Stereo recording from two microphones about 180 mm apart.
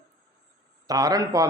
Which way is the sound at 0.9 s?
20° right (ahead or behind).